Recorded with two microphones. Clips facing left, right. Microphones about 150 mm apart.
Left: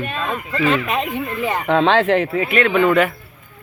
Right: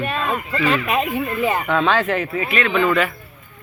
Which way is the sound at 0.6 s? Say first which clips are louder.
Left 1 dB; 5° right (ahead or behind).